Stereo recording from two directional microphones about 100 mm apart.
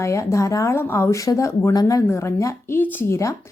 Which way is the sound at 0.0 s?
30° left (ahead or behind).